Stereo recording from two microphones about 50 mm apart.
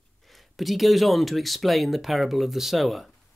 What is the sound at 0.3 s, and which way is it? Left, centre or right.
Speech, centre.